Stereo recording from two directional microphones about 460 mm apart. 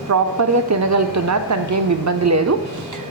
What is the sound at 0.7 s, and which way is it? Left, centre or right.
A woman's voice, right.